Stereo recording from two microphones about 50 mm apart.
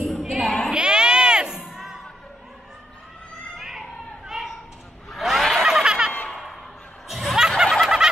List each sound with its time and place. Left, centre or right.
0.0 s a sound: centre
0.7 s crowd: centre
3.5 s children playing: centre
4.3 s a sound: centre
5.1 s snicker: centre
7.1 s laughter: centre
7.6 s snicker: centre